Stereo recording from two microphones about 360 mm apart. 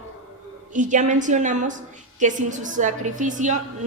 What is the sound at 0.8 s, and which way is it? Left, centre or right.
A woman's voice, right.